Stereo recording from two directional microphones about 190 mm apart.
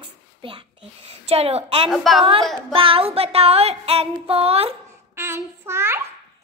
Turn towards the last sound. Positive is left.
turn(degrees=-15)  # may be behind; listen again after turning